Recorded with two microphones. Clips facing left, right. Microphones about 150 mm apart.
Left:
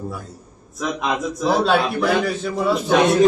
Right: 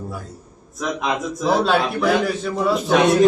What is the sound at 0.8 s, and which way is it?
A man's voice, centre (ahead or behind).